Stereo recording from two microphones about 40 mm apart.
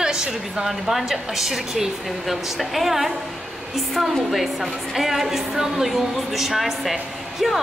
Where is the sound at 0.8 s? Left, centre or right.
Centre.